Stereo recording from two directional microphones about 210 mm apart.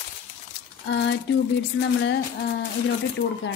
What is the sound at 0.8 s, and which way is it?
Speech, 55° left (ahead or behind).